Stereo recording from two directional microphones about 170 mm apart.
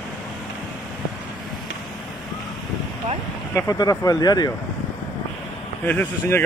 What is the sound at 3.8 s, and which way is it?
Speech, 20° left (ahead or behind).